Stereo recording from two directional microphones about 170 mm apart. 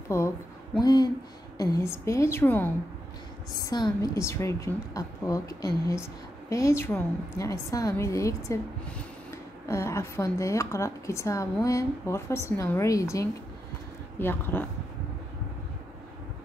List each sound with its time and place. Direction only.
0.1 s a woman's voice: 15° left (ahead or behind)
3.5 s a woman's voice: 20° left (ahead or behind)